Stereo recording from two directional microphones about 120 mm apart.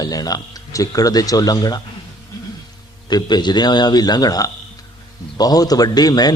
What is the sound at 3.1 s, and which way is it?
A man's voice, 35° left (ahead or behind).